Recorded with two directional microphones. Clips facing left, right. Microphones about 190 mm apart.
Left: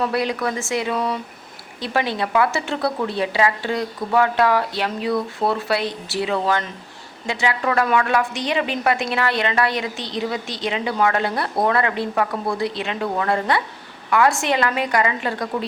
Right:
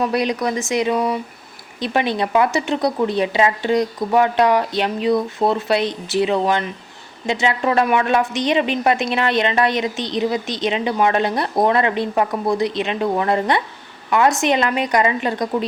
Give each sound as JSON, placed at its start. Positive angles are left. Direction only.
{"t": 0.0, "sound": "a woman's voice", "side_deg": -20}